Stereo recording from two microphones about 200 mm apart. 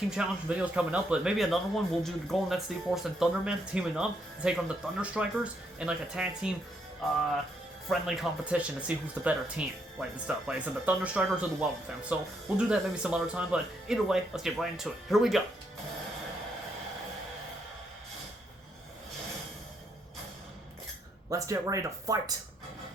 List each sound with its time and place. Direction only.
0.2 s a man's voice: 5° right (ahead or behind)
7.9 s a man's voice: centre (ahead or behind)
21.2 s speech: 15° right (ahead or behind)